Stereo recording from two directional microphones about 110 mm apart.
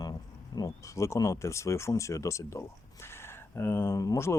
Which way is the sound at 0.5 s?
30° left (ahead or behind).